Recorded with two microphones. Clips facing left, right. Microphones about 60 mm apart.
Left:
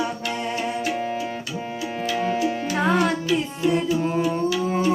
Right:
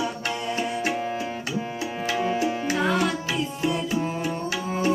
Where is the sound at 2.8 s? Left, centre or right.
Left.